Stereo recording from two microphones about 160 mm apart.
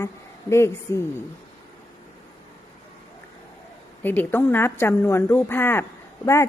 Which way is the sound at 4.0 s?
10° left (ahead or behind).